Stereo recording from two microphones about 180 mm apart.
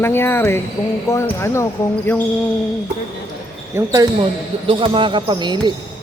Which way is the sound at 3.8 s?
25° right (ahead or behind).